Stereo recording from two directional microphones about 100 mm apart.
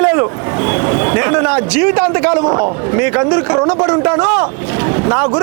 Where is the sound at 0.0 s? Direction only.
25° right (ahead or behind).